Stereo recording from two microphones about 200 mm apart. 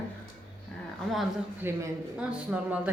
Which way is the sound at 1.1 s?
Centre (ahead or behind).